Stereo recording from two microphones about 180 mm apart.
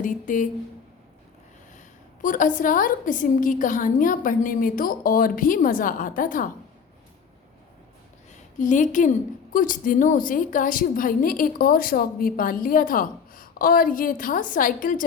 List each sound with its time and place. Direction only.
0.0 s a woman's voice: 45° left (ahead or behind)
2.2 s a woman's voice: 45° left (ahead or behind)
8.5 s a woman's voice: 45° left (ahead or behind)